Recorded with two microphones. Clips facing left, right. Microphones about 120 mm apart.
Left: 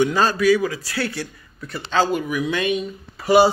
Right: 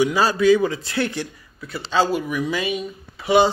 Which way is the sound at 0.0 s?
10° right (ahead or behind).